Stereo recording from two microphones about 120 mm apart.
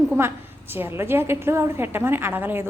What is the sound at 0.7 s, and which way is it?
A woman's voice, 20° right (ahead or behind).